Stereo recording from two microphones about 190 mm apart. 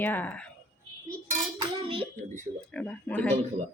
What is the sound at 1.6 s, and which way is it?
Dishes, 30° right (ahead or behind).